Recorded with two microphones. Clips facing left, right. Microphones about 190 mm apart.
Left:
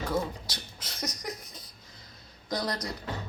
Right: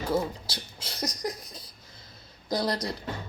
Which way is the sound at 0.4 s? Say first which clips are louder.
Right 3 dB; 30° right (ahead or behind).